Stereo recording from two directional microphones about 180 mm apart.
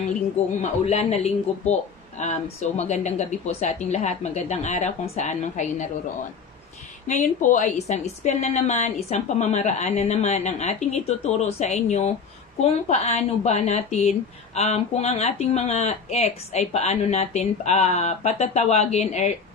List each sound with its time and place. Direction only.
0.6 s speech: 35° left (ahead or behind)
7.1 s speech: 45° left (ahead or behind)